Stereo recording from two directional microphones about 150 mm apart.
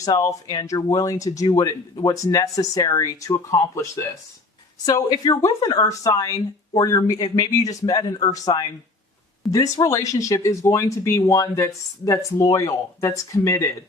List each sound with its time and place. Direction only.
0.0 s speech: 25° left (ahead or behind)